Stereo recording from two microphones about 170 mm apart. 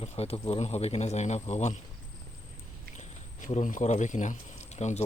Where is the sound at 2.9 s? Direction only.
45° left (ahead or behind).